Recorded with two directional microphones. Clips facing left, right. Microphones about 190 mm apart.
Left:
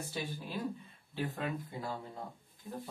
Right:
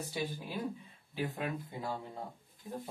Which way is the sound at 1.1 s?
15° right (ahead or behind).